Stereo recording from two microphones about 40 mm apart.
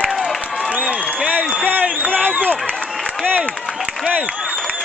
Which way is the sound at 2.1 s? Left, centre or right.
Right.